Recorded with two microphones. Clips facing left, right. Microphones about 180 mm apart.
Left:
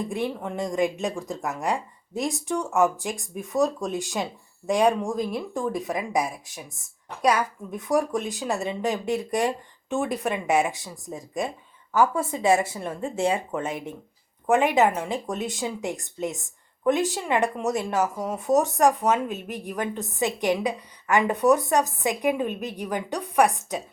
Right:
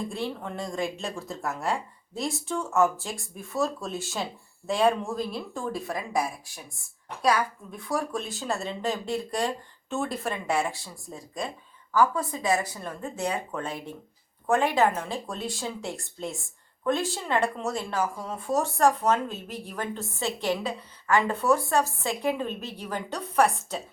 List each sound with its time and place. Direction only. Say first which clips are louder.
0.1 s speech: left 4 dB; 15° left (ahead or behind)